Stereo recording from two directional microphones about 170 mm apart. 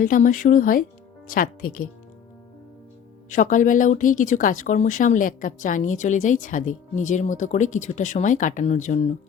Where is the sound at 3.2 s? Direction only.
50° left (ahead or behind).